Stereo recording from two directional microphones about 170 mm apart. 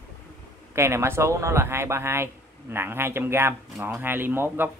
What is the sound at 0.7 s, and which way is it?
Speech, 15° right (ahead or behind).